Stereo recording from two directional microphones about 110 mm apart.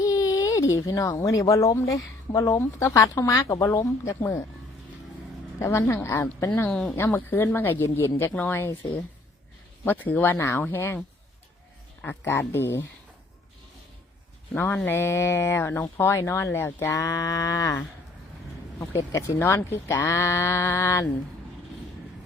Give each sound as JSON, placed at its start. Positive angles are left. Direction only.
{"t": 0.0, "sound": "a sound", "side_deg": 30}
{"t": 1.2, "sound": "speech", "side_deg": 30}
{"t": 5.5, "sound": "speech", "side_deg": 30}
{"t": 6.7, "sound": "speech", "side_deg": 10}
{"t": 6.9, "sound": "speech", "side_deg": 20}
{"t": 9.8, "sound": "speech", "side_deg": 20}
{"t": 12.0, "sound": "speech", "side_deg": 20}
{"t": 14.5, "sound": "speech", "side_deg": 20}
{"t": 18.8, "sound": "speech", "side_deg": 30}